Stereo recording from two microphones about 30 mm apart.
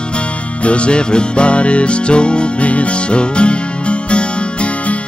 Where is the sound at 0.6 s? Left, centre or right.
Left.